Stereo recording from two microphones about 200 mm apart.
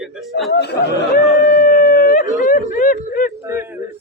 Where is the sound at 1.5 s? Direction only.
45° left (ahead or behind).